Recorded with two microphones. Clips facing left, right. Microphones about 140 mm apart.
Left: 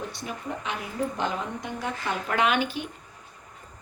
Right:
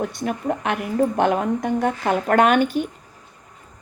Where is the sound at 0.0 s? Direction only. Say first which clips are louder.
Right 10 dB; 60° right (ahead or behind).